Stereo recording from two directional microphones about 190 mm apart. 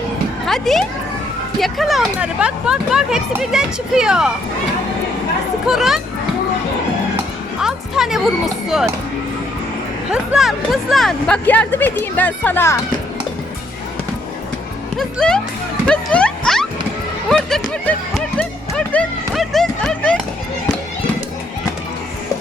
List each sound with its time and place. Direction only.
0.4 s speech: centre (ahead or behind)
5.6 s speech: centre (ahead or behind)
7.6 s music: centre (ahead or behind)
10.1 s speech: centre (ahead or behind)
14.9 s speech: 5° left (ahead or behind)
15.9 s music: 5° left (ahead or behind)
17.2 s a sound: centre (ahead or behind)
17.8 s speech: 5° left (ahead or behind)
18.9 s music: 5° left (ahead or behind)